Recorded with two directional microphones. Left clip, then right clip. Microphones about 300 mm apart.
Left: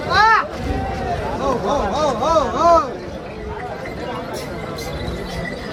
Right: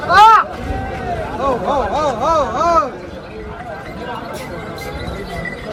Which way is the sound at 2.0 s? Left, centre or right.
Left.